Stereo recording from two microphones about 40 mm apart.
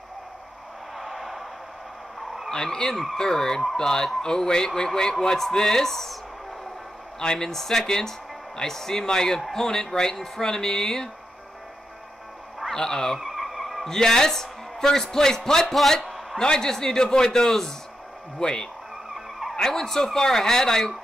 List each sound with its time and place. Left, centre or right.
0.9 s a sound: centre
2.5 s speech: centre
7.2 s speech: centre
12.7 s speech: centre
13.2 s vehicle: centre
13.8 s speech: centre
15.6 s speech: centre
19.7 s speech: centre